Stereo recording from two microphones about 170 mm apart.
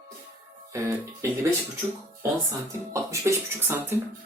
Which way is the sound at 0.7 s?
15° right (ahead or behind).